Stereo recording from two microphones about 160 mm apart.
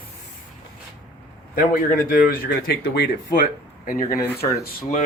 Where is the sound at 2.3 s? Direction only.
70° left (ahead or behind).